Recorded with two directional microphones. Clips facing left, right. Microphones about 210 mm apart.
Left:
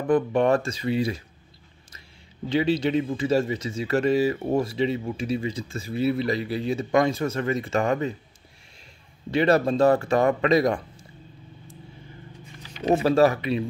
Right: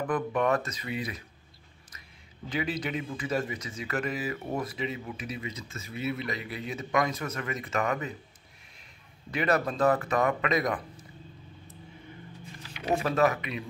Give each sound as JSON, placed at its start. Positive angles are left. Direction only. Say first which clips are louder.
{"t": 0.0, "sound": "speech", "louder": "left 7 dB", "side_deg": 30}
{"t": 2.5, "sound": "speech", "louder": "left 10 dB", "side_deg": 30}
{"t": 9.3, "sound": "speech", "louder": "left 7 dB", "side_deg": 30}
{"t": 12.8, "sound": "speech", "louder": "left 7 dB", "side_deg": 30}